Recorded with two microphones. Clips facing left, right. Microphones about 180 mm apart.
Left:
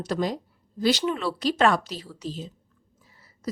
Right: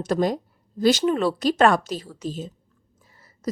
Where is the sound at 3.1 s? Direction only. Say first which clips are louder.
Right 5 dB; 45° right (ahead or behind).